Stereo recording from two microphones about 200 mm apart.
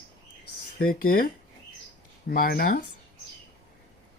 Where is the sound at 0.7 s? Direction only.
45° left (ahead or behind).